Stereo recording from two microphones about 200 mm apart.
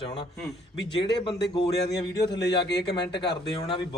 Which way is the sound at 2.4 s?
60° left (ahead or behind).